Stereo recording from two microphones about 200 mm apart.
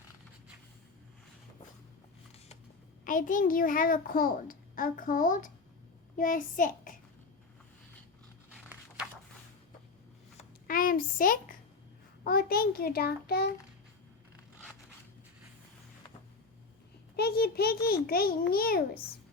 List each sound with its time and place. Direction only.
3.0 s a child's voice: 40° left (ahead or behind)
8.4 s dog: 5° right (ahead or behind)
10.3 s a sound: 45° left (ahead or behind)
12.2 s a child's voice: 50° left (ahead or behind)
17.2 s a child's voice: 50° left (ahead or behind)